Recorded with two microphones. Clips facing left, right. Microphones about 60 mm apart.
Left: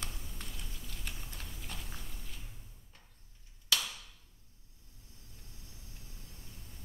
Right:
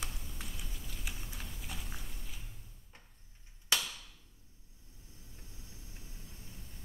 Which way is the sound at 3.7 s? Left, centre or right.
Right.